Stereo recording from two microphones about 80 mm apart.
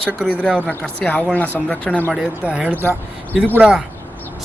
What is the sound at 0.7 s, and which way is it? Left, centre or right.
Speech, left.